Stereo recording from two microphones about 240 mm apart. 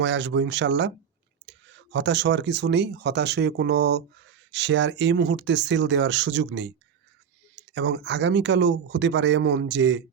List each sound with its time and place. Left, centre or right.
0.0 s speech: right